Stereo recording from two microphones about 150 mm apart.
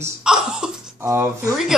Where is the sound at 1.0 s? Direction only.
20° right (ahead or behind).